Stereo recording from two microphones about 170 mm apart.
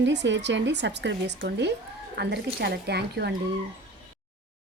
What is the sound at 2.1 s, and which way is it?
A woman's voice, 75° right (ahead or behind).